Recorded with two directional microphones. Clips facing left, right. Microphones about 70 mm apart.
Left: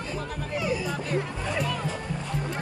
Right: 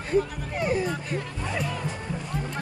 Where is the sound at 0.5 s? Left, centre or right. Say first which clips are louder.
Right 3 dB; right.